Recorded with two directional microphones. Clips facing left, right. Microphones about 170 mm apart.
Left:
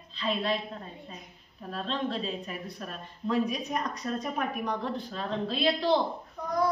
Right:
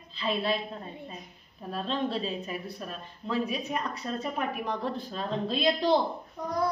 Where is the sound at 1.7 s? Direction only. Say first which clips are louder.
Right 1 dB; 10° right (ahead or behind).